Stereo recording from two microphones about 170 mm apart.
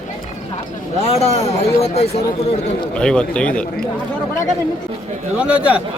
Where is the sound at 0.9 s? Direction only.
40° left (ahead or behind).